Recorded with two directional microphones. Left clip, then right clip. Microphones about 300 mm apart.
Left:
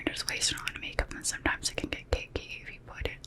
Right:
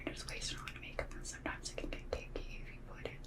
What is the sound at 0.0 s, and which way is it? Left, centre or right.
Whispering, left.